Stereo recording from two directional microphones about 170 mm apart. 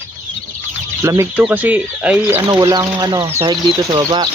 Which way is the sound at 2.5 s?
25° right (ahead or behind).